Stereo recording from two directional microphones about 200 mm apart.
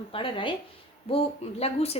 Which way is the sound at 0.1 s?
25° left (ahead or behind).